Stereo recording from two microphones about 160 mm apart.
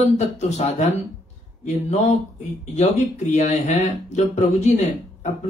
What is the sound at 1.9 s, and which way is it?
Speech, 45° left (ahead or behind).